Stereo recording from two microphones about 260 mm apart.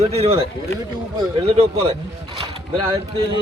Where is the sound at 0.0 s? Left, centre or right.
Right.